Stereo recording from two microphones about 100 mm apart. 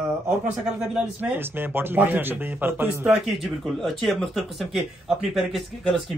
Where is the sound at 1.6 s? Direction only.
20° right (ahead or behind).